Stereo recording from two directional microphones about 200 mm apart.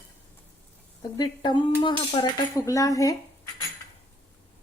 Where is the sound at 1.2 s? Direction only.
20° left (ahead or behind).